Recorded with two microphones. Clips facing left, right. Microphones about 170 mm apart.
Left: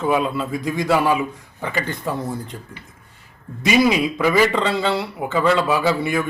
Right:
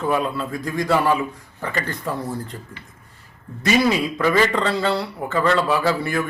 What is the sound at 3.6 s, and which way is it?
A man's voice, 10° left (ahead or behind).